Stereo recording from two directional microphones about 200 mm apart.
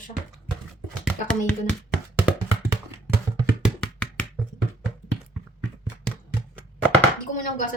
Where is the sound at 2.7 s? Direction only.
10° right (ahead or behind).